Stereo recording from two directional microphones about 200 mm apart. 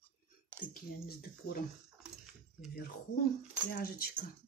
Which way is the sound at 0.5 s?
10° right (ahead or behind).